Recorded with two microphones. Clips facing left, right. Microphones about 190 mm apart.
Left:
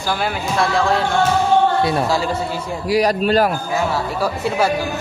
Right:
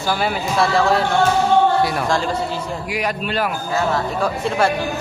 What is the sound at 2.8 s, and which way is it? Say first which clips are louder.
Speech: left 10 dB; 35° left (ahead or behind).